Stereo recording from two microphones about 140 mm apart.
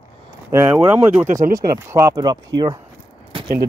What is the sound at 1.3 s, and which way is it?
Speech, 80° right.